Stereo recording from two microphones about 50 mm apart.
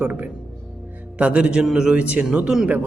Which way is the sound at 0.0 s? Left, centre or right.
Right.